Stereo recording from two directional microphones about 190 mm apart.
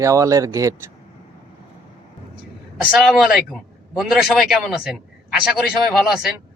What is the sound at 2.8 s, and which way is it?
A man's voice, centre (ahead or behind).